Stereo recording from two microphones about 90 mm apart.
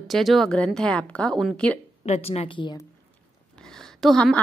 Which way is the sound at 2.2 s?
80° left.